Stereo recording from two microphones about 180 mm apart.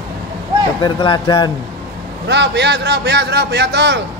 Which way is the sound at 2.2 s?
75° right (ahead or behind).